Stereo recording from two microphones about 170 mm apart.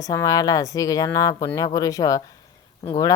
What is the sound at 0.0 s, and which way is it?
Speech, 20° left (ahead or behind).